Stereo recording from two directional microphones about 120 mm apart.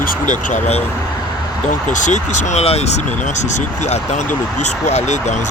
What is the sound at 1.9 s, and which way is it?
Speech, 90° left.